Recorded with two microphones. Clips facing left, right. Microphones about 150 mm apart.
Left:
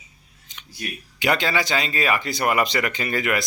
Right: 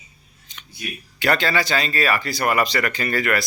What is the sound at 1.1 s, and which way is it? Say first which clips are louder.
Speech: right 1 dB; 15° left (ahead or behind).